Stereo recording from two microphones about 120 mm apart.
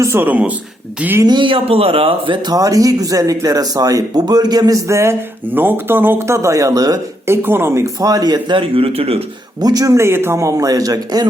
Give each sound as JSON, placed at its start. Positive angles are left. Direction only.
{"t": 0.0, "sound": "speech", "side_deg": -20}
{"t": 1.2, "sound": "speech", "side_deg": -40}
{"t": 7.4, "sound": "speech", "side_deg": -20}
{"t": 9.6, "sound": "speech", "side_deg": -30}